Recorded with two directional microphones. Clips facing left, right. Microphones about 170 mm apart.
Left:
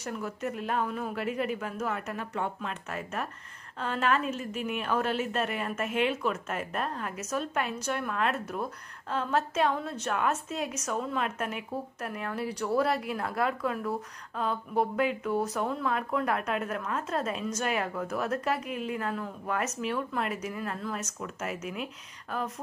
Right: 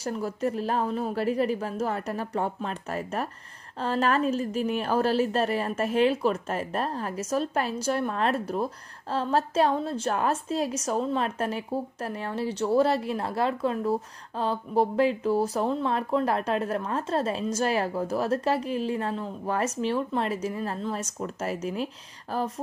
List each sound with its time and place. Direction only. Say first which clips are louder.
0.0 s a woman's voice: right 6 dB; 30° right (ahead or behind)